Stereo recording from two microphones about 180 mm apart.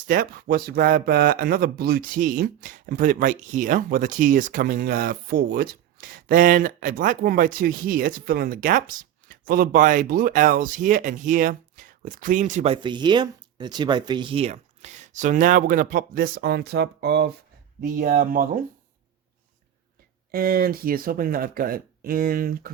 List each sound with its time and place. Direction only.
0.1 s speech: 55° right (ahead or behind)
12.7 s speech: 25° right (ahead or behind); by 17.3 s 65° right (ahead or behind)
17.7 s speech: 50° right (ahead or behind)
20.3 s speech: 55° right (ahead or behind)